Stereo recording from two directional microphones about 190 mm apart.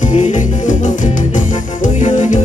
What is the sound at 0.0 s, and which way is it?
Music, 40° left (ahead or behind).